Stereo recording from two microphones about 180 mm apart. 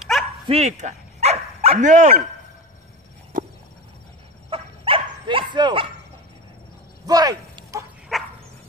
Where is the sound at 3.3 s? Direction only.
50° right (ahead or behind).